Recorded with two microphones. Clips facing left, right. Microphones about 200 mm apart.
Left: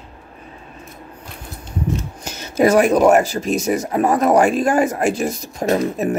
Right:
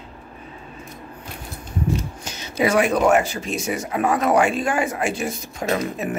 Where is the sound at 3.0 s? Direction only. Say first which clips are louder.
Left 4 dB; 40° left (ahead or behind).